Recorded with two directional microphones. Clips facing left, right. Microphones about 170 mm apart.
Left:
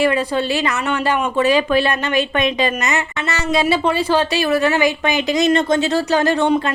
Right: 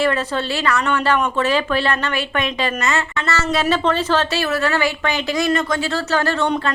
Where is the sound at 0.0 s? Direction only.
15° left (ahead or behind).